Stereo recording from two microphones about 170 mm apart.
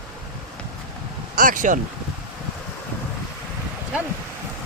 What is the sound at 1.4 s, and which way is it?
Speech, 50° right (ahead or behind).